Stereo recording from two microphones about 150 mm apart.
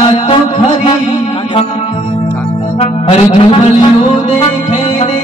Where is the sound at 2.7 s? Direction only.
40° left (ahead or behind).